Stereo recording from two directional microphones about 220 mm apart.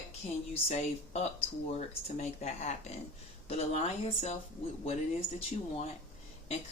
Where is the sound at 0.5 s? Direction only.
30° left (ahead or behind).